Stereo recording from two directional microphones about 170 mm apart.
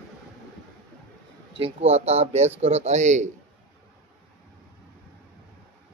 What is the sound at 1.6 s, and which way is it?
Speech, 35° right (ahead or behind).